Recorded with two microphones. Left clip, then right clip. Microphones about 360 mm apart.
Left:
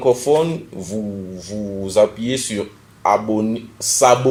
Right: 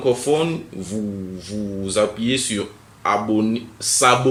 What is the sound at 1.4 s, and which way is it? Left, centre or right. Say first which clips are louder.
Speech: left 3 dB; centre.